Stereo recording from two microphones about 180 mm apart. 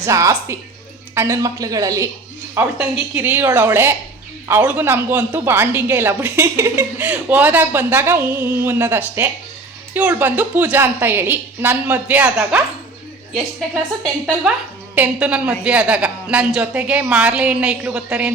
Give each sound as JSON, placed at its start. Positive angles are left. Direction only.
{"t": 0.0, "sound": "speech", "side_deg": -15}
{"t": 14.9, "sound": "speech", "side_deg": -5}